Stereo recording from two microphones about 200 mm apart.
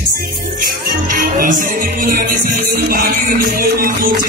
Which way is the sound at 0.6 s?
45° right (ahead or behind).